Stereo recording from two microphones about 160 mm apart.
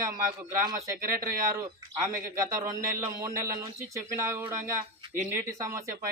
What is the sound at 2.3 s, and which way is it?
Speech, 20° right (ahead or behind).